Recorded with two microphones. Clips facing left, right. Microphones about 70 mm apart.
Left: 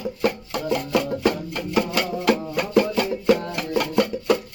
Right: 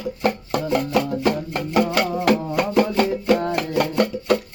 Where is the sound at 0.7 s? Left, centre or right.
Right.